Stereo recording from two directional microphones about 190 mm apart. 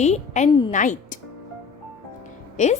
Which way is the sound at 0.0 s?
35° left (ahead or behind).